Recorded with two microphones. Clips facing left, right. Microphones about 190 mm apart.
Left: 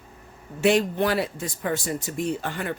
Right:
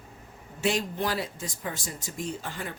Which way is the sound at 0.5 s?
65° left (ahead or behind).